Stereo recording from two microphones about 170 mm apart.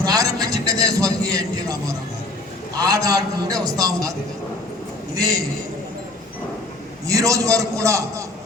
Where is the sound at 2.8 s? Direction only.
20° right (ahead or behind).